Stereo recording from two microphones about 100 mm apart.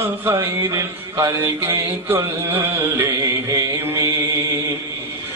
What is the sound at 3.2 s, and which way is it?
Carnatic music, 35° right (ahead or behind).